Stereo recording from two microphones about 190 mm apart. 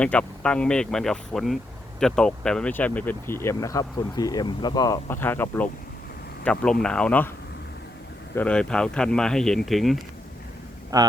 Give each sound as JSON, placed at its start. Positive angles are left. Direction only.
{"t": 0.0, "sound": "speech", "side_deg": 5}
{"t": 8.4, "sound": "speech", "side_deg": 5}
{"t": 10.9, "sound": "speech", "side_deg": -20}